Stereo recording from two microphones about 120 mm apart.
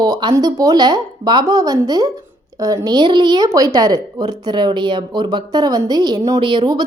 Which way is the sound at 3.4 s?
30° right (ahead or behind).